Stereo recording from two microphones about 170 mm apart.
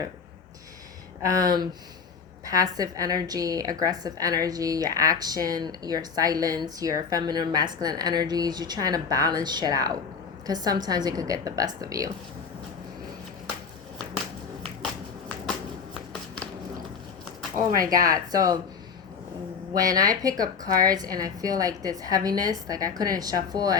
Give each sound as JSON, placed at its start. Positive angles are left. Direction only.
{"t": 1.3, "sound": "a woman's voice", "side_deg": -20}
{"t": 18.0, "sound": "a woman's voice", "side_deg": -20}
{"t": 19.7, "sound": "a woman's voice", "side_deg": -20}